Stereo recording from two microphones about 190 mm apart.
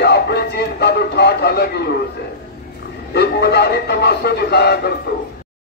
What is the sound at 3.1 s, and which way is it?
Speech, 60° left (ahead or behind).